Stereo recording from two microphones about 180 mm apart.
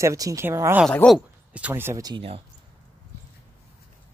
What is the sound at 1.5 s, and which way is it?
Speech, 10° right (ahead or behind).